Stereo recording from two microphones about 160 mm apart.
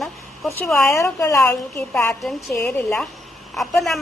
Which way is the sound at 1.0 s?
20° left (ahead or behind).